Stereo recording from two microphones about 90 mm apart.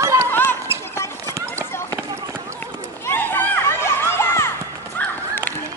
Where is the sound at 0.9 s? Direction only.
30° left (ahead or behind).